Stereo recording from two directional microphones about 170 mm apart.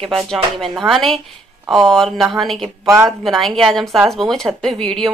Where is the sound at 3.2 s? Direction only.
Centre (ahead or behind).